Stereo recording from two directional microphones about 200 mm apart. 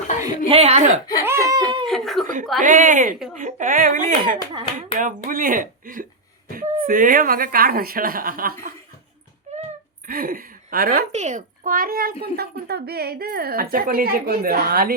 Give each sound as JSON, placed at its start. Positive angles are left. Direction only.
{"t": 0.3, "sound": "a woman's voice", "side_deg": -30}
{"t": 1.2, "sound": "laughter", "side_deg": -15}
{"t": 1.8, "sound": "speech", "side_deg": 0}
{"t": 2.2, "sound": "a woman's voice", "side_deg": -40}
{"t": 9.5, "sound": "a sound", "side_deg": -35}
{"t": 10.1, "sound": "speech", "side_deg": -45}
{"t": 11.1, "sound": "a woman's voice", "side_deg": -35}